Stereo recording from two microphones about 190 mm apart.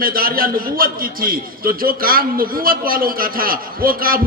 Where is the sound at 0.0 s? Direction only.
50° right (ahead or behind).